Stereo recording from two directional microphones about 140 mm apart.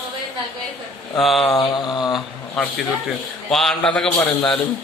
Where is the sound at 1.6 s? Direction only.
35° left (ahead or behind).